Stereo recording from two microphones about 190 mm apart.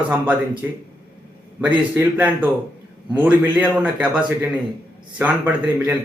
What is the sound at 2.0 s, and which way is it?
A man's voice, 10° right (ahead or behind).